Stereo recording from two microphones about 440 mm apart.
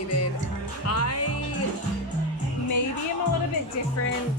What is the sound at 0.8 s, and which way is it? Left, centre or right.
Speech, left.